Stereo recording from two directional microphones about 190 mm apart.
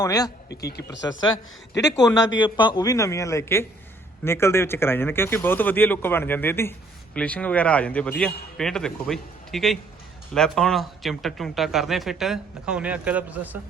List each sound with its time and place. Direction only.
0.0 s speech: 20° left (ahead or behind)
0.6 s speech: 60° left (ahead or behind)
1.1 s speech: 15° left (ahead or behind)
2.4 s speech: 25° left (ahead or behind); by 13.6 s 10° right (ahead or behind)